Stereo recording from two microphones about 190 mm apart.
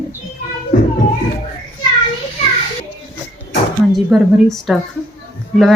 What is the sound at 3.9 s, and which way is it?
Speech, centre (ahead or behind).